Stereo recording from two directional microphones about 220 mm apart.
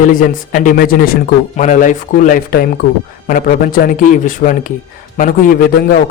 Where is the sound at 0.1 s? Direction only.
35° left (ahead or behind).